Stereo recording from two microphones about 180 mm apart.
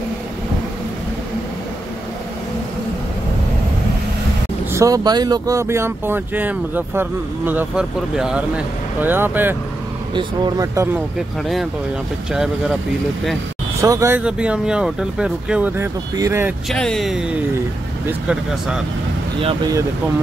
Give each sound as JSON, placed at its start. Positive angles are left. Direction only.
{"t": 4.7, "sound": "speech", "side_deg": -20}
{"t": 10.1, "sound": "speech", "side_deg": -20}
{"t": 12.3, "sound": "speech", "side_deg": -5}
{"t": 13.7, "sound": "speech", "side_deg": -15}
{"t": 16.7, "sound": "speech", "side_deg": 5}
{"t": 19.4, "sound": "speech", "side_deg": -20}